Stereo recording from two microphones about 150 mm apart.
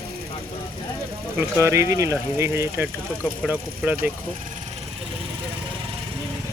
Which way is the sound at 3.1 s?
5° left (ahead or behind).